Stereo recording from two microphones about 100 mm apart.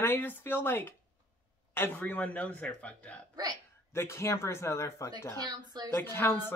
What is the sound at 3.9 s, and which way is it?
Speech, 25° left (ahead or behind).